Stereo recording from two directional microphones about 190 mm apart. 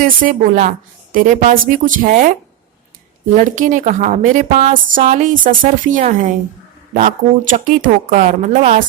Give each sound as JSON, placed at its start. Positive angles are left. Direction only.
{"t": 0.0, "sound": "speech", "side_deg": -45}
{"t": 3.3, "sound": "speech", "side_deg": -40}
{"t": 7.5, "sound": "speech", "side_deg": -40}